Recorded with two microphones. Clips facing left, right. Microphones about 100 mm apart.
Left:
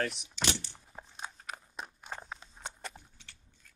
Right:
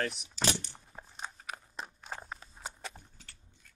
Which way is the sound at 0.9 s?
Centre (ahead or behind).